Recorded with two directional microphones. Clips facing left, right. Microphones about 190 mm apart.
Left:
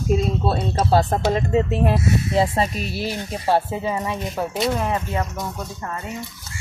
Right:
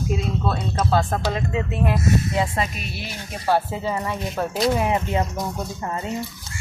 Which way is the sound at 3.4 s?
20° left (ahead or behind).